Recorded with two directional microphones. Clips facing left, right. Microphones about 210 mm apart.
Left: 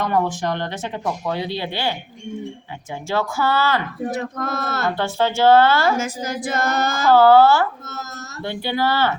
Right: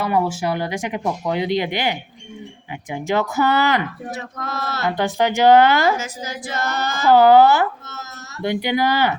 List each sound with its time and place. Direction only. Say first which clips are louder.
0.0 s speech: right 1 dB; 5° right (ahead or behind)
4.1 s female singing: left 4 dB; 50° left (ahead or behind)
4.9 s speech: right 2 dB; 15° right (ahead or behind)
6.0 s female singing: left 5 dB; 50° left (ahead or behind)
7.0 s speech: right 1 dB; 15° right (ahead or behind)